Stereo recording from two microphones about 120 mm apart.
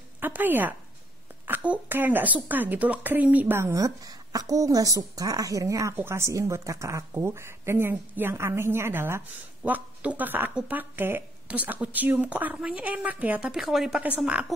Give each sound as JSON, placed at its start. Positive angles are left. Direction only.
{"t": 0.2, "sound": "a woman's voice", "side_deg": -15}
{"t": 13.5, "sound": "a woman's voice", "side_deg": 0}